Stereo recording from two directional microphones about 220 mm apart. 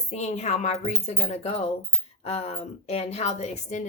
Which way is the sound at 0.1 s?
30° left (ahead or behind).